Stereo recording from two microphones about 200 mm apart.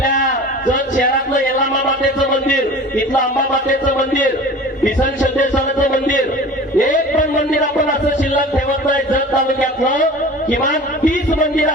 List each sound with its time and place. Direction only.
0.7 s a man's voice: 40° left (ahead or behind)
3.7 s a man's voice: 40° left (ahead or behind)
8.9 s a man's voice: 40° left (ahead or behind)